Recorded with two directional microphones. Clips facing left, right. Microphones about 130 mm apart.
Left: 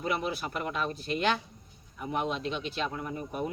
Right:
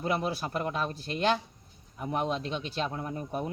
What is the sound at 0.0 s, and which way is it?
A man's voice, 35° right (ahead or behind).